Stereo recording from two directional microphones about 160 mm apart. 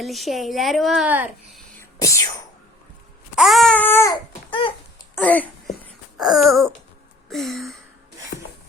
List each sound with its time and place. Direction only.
0.0 s a woman's voice: centre (ahead or behind)
1.0 s a child's voice: 10° right (ahead or behind)
1.8 s speech: 20° left (ahead or behind)
3.3 s baby cry: centre (ahead or behind)
6.1 s a woman's voice: centre (ahead or behind)
8.3 s rub: 70° left (ahead or behind)